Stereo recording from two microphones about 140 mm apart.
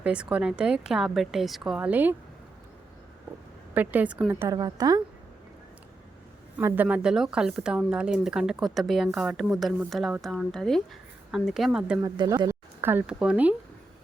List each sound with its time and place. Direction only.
0.0 s a woman's voice: 5° right (ahead or behind)
3.8 s a woman's voice: 10° right (ahead or behind)
4.4 s a woman's voice: 30° right (ahead or behind)
6.6 s a woman's voice: 20° right (ahead or behind)
6.8 s speech: 5° right (ahead or behind)
12.0 s a woman's voice: 30° right (ahead or behind)
12.5 s speech: 15° right (ahead or behind)